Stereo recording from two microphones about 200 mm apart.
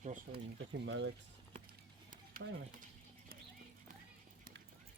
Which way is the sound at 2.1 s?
45° right (ahead or behind).